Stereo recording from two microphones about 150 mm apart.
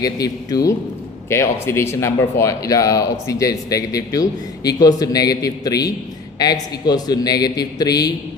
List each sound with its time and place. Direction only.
0.0 s speech: 25° left (ahead or behind)